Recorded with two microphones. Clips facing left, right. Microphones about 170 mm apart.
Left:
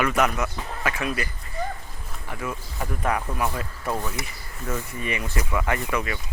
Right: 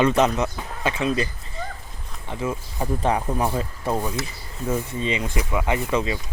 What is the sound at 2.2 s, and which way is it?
Speech, 25° right (ahead or behind).